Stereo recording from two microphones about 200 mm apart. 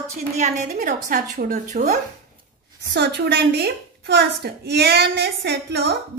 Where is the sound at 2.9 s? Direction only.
55° right (ahead or behind).